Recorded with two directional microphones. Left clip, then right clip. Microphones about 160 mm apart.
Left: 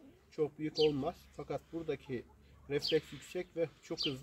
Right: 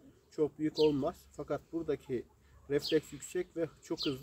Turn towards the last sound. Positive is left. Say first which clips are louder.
# even
turn(degrees=-40)  # may be behind; listen again after turning